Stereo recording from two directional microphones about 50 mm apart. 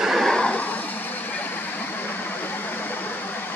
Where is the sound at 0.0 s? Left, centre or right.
Centre.